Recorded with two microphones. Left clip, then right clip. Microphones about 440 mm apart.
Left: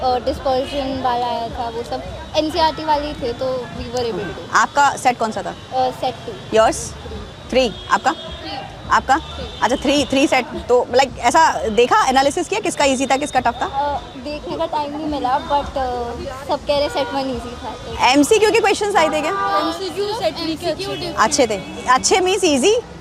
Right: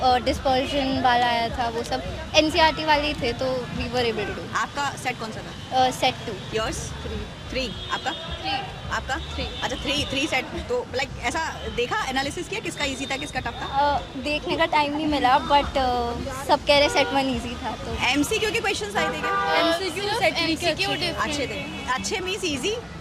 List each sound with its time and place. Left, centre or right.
0.0 s a woman's voice: right
4.5 s speech: left
5.7 s a woman's voice: right
6.5 s speech: left
13.8 s a woman's voice: right
18.0 s a woman's voice: left
20.7 s a woman's voice: right
21.2 s speech: left